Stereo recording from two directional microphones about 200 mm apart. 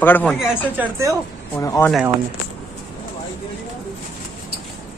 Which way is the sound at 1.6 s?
15° left (ahead or behind).